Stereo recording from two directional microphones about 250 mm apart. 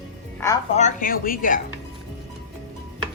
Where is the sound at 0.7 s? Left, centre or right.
Left.